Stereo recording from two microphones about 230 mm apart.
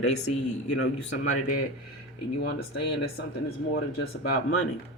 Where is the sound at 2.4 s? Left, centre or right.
Left.